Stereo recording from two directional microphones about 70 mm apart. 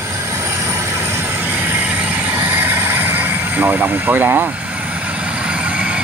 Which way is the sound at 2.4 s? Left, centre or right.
Right.